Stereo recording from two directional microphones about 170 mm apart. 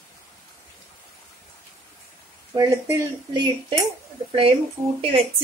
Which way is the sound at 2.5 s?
20° right (ahead or behind).